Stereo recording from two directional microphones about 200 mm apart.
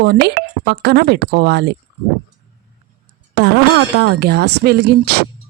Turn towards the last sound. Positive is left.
turn(degrees=-55)  # may be behind; listen again after turning